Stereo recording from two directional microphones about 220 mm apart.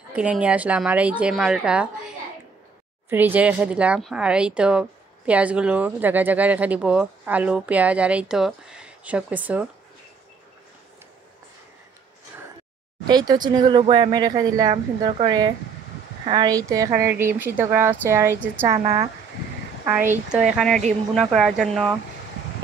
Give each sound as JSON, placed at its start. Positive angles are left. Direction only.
{"t": 0.1, "sound": "speech", "side_deg": -5}
{"t": 3.1, "sound": "speech", "side_deg": -10}
{"t": 13.1, "sound": "a woman's voice", "side_deg": -20}
{"t": 19.8, "sound": "a woman's voice", "side_deg": -10}